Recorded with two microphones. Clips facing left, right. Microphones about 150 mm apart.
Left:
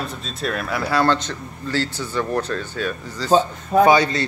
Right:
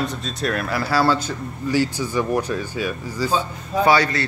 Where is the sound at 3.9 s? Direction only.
20° left (ahead or behind).